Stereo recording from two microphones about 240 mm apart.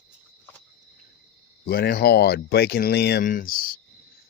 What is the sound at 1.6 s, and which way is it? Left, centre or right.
Speech, left.